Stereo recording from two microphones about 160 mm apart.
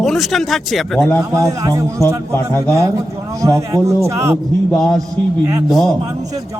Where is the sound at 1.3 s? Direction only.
20° right (ahead or behind).